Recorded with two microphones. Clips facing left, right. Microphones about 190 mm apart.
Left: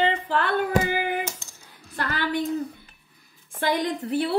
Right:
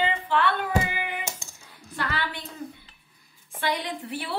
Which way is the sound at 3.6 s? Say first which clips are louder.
Left 5 dB; 45° left (ahead or behind).